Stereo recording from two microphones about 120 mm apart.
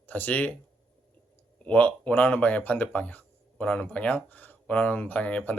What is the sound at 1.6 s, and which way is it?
Speech, 10° left (ahead or behind).